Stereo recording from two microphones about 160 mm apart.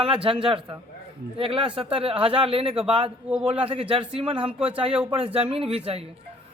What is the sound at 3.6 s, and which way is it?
A man's voice, 35° right (ahead or behind).